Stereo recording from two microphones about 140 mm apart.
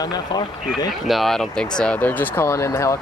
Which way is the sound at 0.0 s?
30° left (ahead or behind).